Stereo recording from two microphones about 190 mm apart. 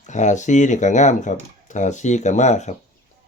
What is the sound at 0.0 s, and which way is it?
Speech, 40° left (ahead or behind).